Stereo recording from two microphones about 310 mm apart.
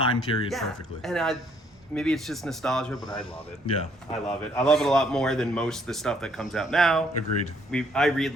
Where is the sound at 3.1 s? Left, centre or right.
Centre.